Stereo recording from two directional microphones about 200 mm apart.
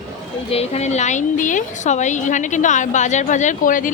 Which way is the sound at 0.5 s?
30° left (ahead or behind).